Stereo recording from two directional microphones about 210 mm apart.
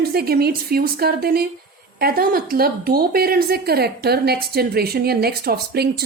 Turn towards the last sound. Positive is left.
turn(degrees=-50)  # may be behind; listen again after turning